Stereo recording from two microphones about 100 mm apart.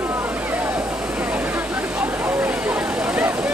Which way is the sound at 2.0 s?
15° right (ahead or behind).